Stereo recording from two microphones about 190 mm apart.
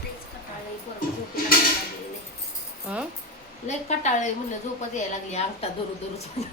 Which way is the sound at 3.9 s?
40° left (ahead or behind).